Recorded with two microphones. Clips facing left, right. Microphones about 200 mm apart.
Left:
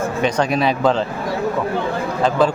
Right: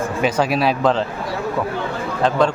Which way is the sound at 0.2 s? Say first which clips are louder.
Even; 5° right (ahead or behind).